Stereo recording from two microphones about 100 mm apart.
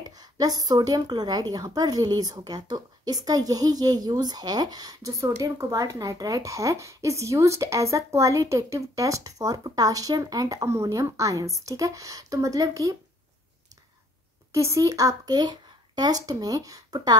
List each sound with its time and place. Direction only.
0.1 s a woman's voice: 40° right (ahead or behind)
14.5 s speech: 30° right (ahead or behind)